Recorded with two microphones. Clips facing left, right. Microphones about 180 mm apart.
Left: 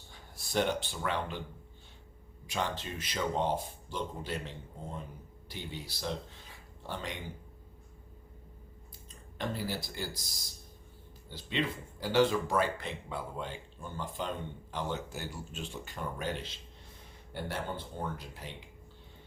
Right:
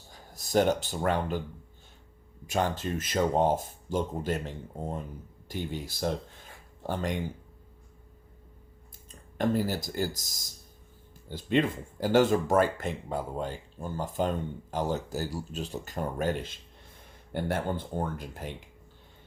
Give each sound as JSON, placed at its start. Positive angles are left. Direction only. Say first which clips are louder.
{"t": 0.1, "sound": "speech", "louder": "right 8 dB", "side_deg": -40}
{"t": 2.5, "sound": "speech", "louder": "right 7 dB", "side_deg": -45}
{"t": 9.4, "sound": "speech", "louder": "right 8 dB", "side_deg": -45}